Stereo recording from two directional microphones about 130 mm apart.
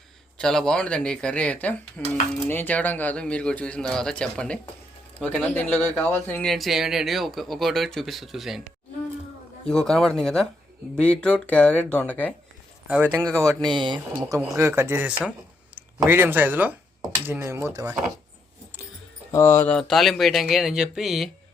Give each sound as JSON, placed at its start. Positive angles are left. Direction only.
{"t": 0.3, "sound": "speech", "side_deg": 5}
{"t": 6.4, "sound": "speech", "side_deg": 0}
{"t": 12.9, "sound": "speech", "side_deg": -15}
{"t": 13.7, "sound": "speech", "side_deg": -35}
{"t": 19.3, "sound": "speech", "side_deg": 20}
{"t": 19.7, "sound": "speech", "side_deg": 0}